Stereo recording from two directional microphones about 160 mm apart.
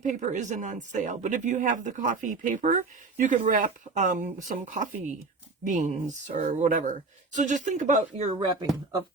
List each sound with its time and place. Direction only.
0.0 s speech: 50° right (ahead or behind)